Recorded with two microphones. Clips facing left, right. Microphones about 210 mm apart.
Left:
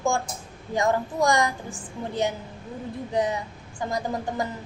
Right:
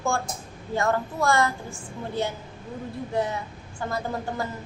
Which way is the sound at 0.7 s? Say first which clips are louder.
Left 1 dB; 15° left (ahead or behind).